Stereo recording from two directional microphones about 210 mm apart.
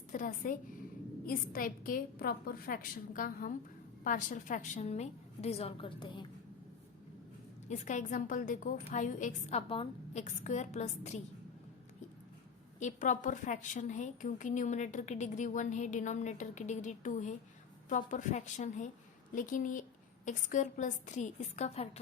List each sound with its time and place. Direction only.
0.1 s a woman's voice: 40° left (ahead or behind); by 6.2 s 20° left (ahead or behind)
7.7 s a woman's voice: 35° left (ahead or behind)
12.8 s a woman's voice: 35° left (ahead or behind)